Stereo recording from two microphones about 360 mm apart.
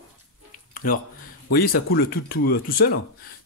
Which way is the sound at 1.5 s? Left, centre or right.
Left.